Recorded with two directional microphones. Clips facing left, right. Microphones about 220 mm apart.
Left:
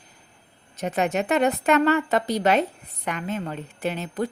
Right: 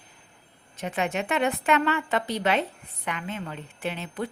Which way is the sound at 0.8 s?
40° left (ahead or behind).